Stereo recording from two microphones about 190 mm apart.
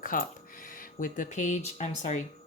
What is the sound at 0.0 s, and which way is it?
Speech, 45° left (ahead or behind).